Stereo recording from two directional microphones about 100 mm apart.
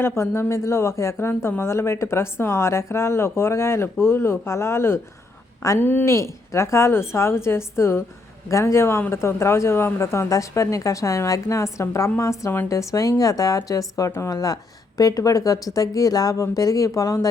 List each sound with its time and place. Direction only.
0.0 s speech: 25° left (ahead or behind)